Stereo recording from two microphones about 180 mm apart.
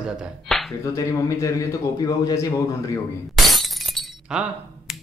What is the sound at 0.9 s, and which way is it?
Speech, 20° left (ahead or behind).